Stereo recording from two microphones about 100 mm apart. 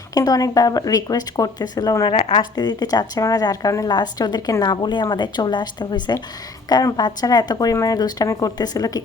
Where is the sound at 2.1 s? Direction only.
55° left (ahead or behind).